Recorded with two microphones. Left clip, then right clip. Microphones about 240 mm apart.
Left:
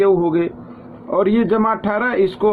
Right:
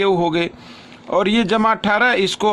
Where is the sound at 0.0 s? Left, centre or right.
Right.